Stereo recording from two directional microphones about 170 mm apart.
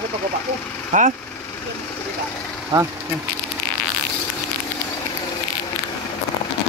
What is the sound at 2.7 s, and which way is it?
Speech, 20° right (ahead or behind).